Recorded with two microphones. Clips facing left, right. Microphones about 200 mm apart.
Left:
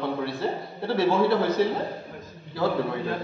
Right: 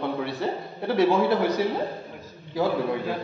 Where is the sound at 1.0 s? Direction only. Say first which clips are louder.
Right 1 dB; 15° right (ahead or behind).